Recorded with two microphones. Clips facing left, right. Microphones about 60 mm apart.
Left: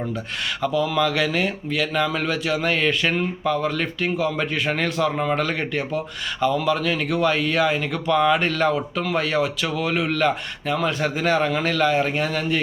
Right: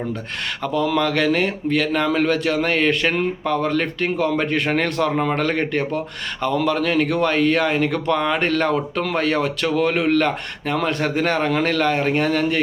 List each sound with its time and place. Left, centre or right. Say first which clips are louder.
0.6 s speech: right 1 dB; right
5.2 s speech: right 2 dB; right